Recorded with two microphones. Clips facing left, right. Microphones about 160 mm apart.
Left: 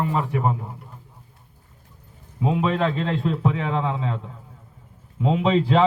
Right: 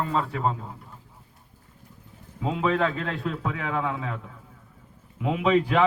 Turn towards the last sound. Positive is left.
turn(degrees=30)  # may be behind; listen again after turning